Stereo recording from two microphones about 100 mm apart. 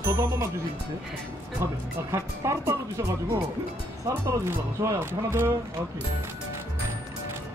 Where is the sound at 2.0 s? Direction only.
30° right (ahead or behind).